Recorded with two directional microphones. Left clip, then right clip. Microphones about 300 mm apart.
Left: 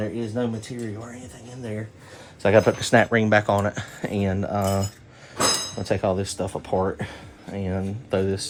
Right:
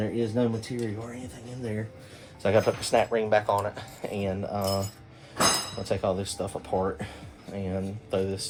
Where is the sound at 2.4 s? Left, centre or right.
Left.